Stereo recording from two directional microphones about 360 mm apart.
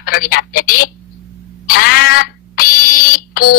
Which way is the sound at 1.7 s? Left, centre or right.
Left.